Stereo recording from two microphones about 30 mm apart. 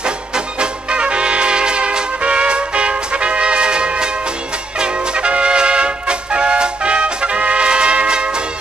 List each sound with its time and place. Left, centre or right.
0.6 s music: right